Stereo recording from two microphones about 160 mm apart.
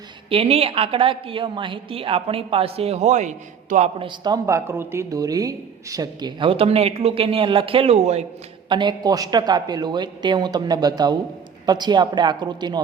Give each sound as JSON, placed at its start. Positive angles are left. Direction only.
{"t": 0.3, "sound": "a woman's voice", "side_deg": -40}
{"t": 8.7, "sound": "speech", "side_deg": -30}